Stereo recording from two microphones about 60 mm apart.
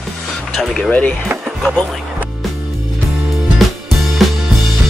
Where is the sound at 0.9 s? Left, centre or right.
Left.